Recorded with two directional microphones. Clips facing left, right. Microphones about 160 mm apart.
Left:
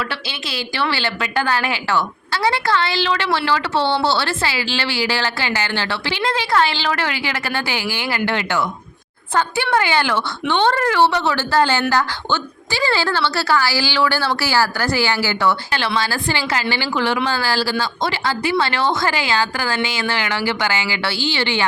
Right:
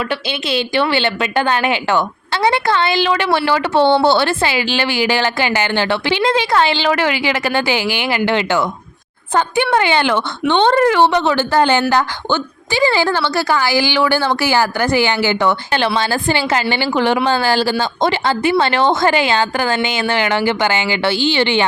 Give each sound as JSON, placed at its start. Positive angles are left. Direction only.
{"t": 0.1, "sound": "a woman's voice", "side_deg": -20}